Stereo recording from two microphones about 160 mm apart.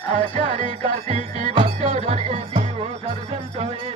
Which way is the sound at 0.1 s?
30° left (ahead or behind).